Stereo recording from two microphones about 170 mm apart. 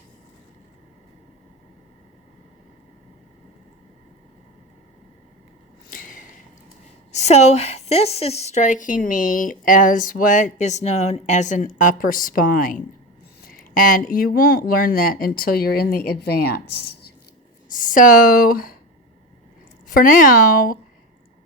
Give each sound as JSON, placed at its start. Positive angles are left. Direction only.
{"t": 5.9, "sound": "a sound", "side_deg": 55}
{"t": 7.1, "sound": "a woman's voice", "side_deg": 40}
{"t": 17.7, "sound": "speech", "side_deg": 50}
{"t": 19.9, "sound": "speech", "side_deg": 55}